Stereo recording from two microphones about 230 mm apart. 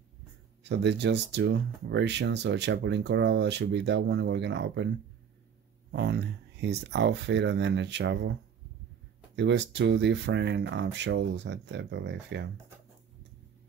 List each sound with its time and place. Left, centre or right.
0.7 s speech: right
5.9 s speech: right